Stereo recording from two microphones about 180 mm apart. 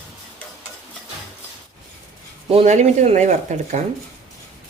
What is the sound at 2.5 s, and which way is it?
Speech, 35° right (ahead or behind).